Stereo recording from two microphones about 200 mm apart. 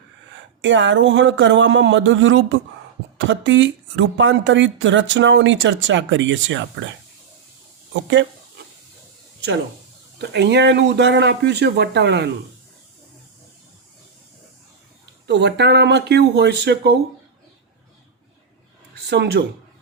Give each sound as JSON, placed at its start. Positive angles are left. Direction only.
{"t": 0.6, "sound": "speech", "side_deg": -65}
{"t": 8.0, "sound": "speech", "side_deg": -65}
{"t": 10.2, "sound": "speech", "side_deg": -60}
{"t": 15.3, "sound": "speech", "side_deg": -60}
{"t": 19.0, "sound": "speech", "side_deg": -55}